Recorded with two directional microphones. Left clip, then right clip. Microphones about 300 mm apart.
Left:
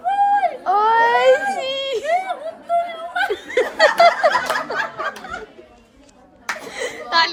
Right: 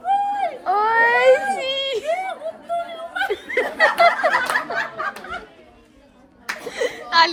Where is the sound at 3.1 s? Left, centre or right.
Centre.